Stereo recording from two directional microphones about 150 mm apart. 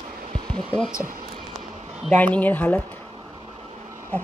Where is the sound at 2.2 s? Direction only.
10° left (ahead or behind).